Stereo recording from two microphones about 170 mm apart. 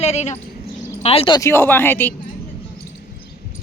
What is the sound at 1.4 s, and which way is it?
Speech, 15° left (ahead or behind).